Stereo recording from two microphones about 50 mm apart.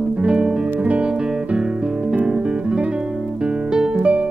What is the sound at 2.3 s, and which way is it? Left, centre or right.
Guitar, centre.